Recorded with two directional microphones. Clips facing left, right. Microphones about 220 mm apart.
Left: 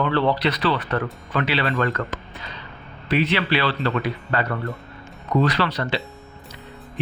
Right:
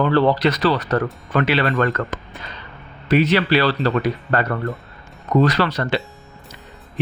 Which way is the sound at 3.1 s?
45° right (ahead or behind).